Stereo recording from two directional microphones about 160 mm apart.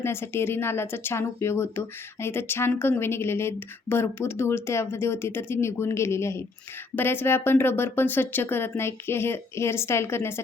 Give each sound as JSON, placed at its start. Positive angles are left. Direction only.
{"t": 0.0, "sound": "speech", "side_deg": 15}